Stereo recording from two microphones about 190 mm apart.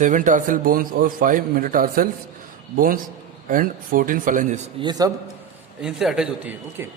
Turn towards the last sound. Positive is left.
turn(degrees=-10)  # may be behind; listen again after turning